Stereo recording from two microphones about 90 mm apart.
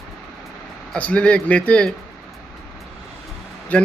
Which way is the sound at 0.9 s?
15° left (ahead or behind).